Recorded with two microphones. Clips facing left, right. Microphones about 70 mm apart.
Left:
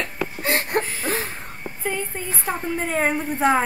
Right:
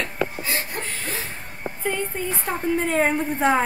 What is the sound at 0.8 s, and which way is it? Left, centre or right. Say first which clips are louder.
Speech: left 2 dB; centre.